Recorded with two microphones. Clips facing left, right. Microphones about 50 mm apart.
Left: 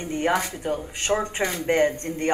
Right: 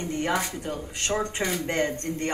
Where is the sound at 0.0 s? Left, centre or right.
Left.